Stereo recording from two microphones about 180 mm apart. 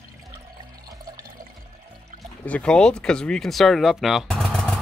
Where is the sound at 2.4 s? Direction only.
5° left (ahead or behind).